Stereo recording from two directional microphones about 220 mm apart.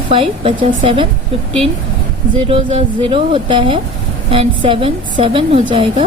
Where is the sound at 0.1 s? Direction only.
25° right (ahead or behind).